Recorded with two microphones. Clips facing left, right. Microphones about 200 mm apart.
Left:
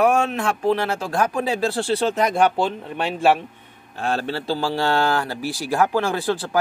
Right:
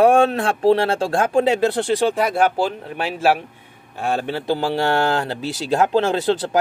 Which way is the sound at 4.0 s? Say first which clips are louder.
Right 2 dB; 15° right (ahead or behind).